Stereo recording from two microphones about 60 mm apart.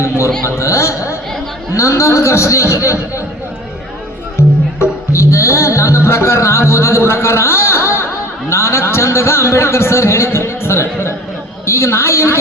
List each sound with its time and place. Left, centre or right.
0.4 s a woman's voice: left
4.4 s music: left
11.6 s a woman's voice: left